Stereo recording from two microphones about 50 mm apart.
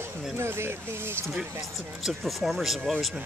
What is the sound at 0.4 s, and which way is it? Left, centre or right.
Speech, right.